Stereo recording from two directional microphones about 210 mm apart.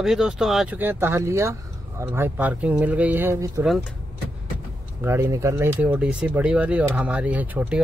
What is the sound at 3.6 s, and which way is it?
Speech, centre (ahead or behind).